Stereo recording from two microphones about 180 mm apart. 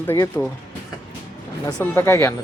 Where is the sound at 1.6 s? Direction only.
15° left (ahead or behind).